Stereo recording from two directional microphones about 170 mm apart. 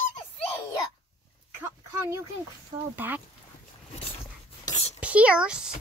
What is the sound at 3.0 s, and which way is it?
Speech, 10° right (ahead or behind).